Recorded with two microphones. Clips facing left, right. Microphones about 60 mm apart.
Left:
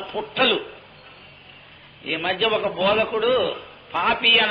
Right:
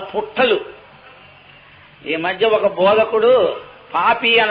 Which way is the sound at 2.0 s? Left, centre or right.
Centre.